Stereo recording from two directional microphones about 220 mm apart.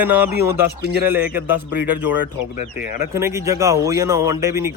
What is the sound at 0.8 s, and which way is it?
Speech, 45° right (ahead or behind).